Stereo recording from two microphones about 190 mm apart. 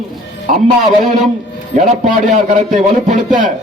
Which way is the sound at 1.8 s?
35° right (ahead or behind).